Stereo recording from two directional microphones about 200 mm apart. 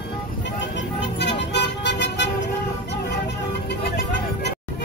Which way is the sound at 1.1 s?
60° left (ahead or behind).